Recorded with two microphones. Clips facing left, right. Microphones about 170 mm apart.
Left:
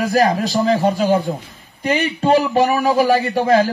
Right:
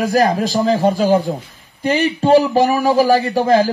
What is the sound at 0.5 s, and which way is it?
Speech, 5° right (ahead or behind).